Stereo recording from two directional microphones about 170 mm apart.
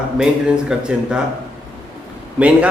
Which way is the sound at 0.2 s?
5° right (ahead or behind).